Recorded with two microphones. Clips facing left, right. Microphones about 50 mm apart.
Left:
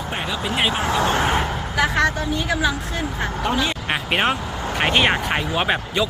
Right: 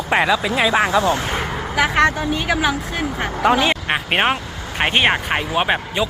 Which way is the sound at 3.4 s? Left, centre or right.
Right.